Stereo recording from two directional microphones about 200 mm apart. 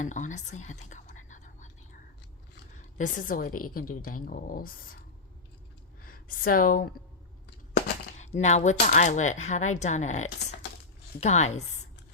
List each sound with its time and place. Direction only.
0.0 s speech: 40° left (ahead or behind)
1.1 s whispering: 40° left (ahead or behind)
2.7 s a woman's voice: 40° left (ahead or behind)
6.1 s a woman's voice: 45° left (ahead or behind)
8.2 s speech: 35° left (ahead or behind)